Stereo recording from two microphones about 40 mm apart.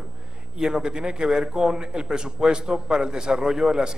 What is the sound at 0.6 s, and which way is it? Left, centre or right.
A man's voice, centre.